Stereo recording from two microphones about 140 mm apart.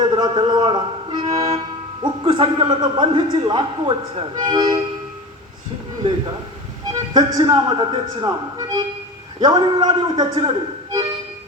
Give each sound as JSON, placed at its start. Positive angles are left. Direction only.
{"t": 0.0, "sound": "a man's voice", "side_deg": -30}
{"t": 6.0, "sound": "a man's voice", "side_deg": -35}